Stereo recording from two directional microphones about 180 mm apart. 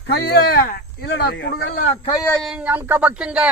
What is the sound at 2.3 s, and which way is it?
Speech, centre (ahead or behind).